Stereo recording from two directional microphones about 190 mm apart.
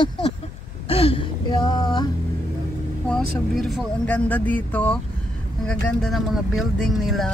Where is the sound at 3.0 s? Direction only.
Centre (ahead or behind).